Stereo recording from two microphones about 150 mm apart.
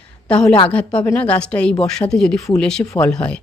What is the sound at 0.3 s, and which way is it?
A woman's voice, 5° left (ahead or behind).